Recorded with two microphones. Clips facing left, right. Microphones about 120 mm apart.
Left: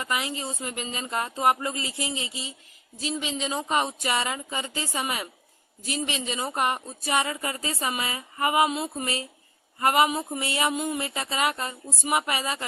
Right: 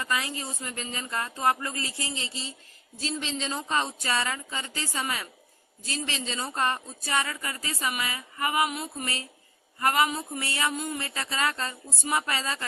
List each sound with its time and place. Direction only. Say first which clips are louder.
0.0 s speech: left 1 dB; 20° left (ahead or behind)